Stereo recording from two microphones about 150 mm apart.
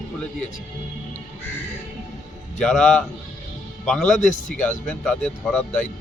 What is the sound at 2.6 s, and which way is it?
A man's voice, 5° left (ahead or behind).